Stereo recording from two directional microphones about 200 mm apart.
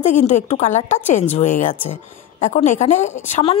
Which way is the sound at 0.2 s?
35° left (ahead or behind).